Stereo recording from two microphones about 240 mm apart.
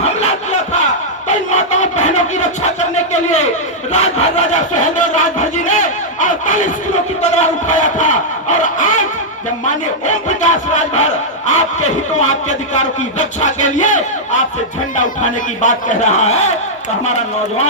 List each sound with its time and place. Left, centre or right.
1.3 s battle cry: left
3.9 s sawing: left
7.2 s speech: left